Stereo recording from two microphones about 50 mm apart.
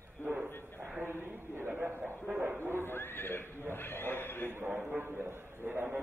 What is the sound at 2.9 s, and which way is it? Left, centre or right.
Horse, left.